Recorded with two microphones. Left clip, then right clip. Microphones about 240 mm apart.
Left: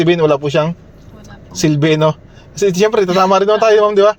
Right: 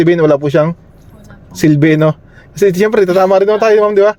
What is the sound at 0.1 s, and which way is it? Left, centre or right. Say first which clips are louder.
Speech: right 2 dB; right.